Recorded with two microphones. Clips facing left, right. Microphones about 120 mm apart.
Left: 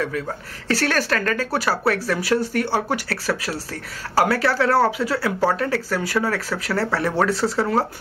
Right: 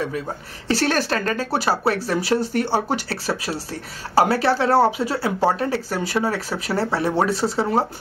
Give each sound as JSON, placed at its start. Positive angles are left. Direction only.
{"t": 0.7, "sound": "speech", "side_deg": -25}